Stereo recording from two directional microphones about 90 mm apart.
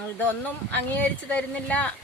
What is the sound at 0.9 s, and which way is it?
Speech, 15° left (ahead or behind).